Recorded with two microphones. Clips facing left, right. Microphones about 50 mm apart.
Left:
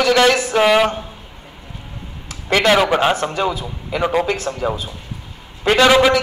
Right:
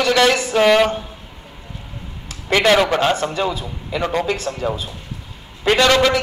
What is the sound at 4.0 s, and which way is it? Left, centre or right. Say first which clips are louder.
A man's voice: left 2 dB; centre.